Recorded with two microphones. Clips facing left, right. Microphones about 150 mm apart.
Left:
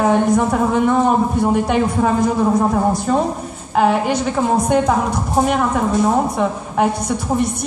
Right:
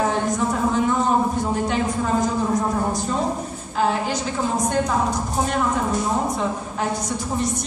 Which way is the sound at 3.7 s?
60° left (ahead or behind).